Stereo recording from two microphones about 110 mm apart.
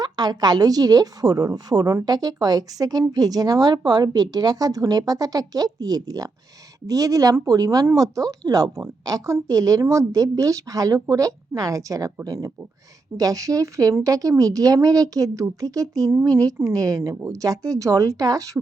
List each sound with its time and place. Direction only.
0.0 s a woman's voice: 40° right (ahead or behind)